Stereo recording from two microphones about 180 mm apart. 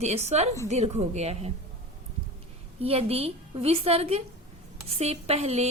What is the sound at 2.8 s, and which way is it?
A woman's voice, 35° right (ahead or behind).